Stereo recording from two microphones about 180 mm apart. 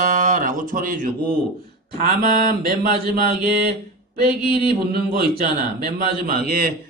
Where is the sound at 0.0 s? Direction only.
45° right (ahead or behind).